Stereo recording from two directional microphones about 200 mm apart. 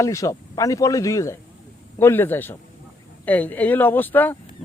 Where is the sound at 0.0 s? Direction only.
15° left (ahead or behind).